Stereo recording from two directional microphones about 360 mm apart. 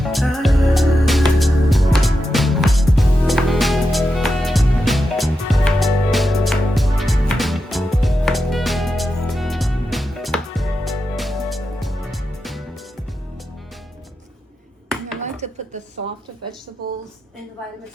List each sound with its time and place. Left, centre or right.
0.0 s music: centre
15.2 s dishes: centre